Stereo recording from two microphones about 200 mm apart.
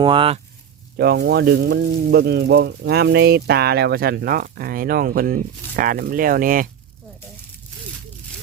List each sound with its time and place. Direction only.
0.0 s speech: 25° right (ahead or behind)
0.9 s speech: 55° right (ahead or behind)